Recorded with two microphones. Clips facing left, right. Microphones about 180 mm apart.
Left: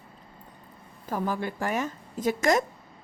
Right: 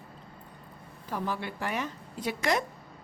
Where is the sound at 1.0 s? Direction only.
45° left (ahead or behind).